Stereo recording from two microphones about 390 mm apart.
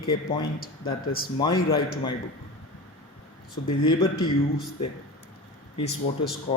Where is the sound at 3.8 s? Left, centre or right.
Centre.